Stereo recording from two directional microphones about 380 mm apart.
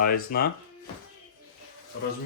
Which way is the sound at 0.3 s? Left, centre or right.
Left.